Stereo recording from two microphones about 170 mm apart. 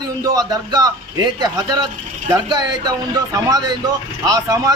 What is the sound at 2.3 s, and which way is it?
A man's voice, 25° right (ahead or behind).